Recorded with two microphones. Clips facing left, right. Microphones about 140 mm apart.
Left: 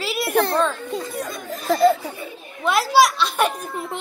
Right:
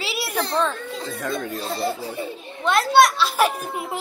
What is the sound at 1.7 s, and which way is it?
Speech, 90° left.